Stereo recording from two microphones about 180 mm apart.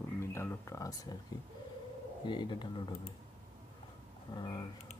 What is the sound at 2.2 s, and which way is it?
Speech, 25° left (ahead or behind).